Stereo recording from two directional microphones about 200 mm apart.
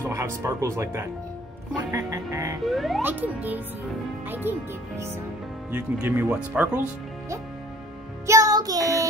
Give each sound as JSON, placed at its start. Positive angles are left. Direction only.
{"t": 0.0, "sound": "speech", "side_deg": -15}
{"t": 2.6, "sound": "speech", "side_deg": 0}
{"t": 8.3, "sound": "music", "side_deg": -15}